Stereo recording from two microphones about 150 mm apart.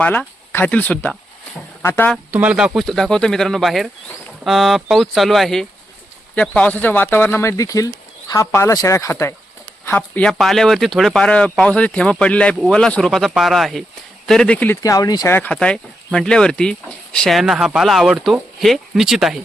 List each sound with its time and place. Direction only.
0.0 s speech: 10° left (ahead or behind)
2.3 s speech: 10° right (ahead or behind); by 14.8 s 10° left (ahead or behind)
14.8 s speech: 20° left (ahead or behind)
15.4 s speech: 10° left (ahead or behind)